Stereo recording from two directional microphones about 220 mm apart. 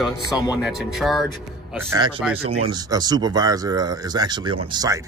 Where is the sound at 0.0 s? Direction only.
5° right (ahead or behind).